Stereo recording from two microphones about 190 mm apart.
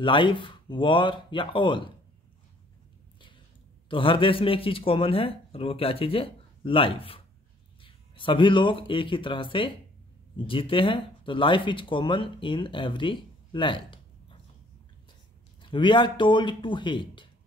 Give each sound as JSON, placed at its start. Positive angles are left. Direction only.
{"t": 0.0, "sound": "speech", "side_deg": 25}
{"t": 3.9, "sound": "speech", "side_deg": 25}
{"t": 15.6, "sound": "speech", "side_deg": 25}